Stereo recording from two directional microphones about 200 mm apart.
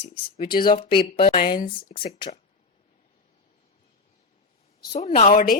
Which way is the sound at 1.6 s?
25° left (ahead or behind).